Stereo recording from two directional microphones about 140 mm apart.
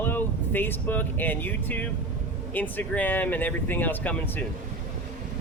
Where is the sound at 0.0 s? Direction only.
15° left (ahead or behind).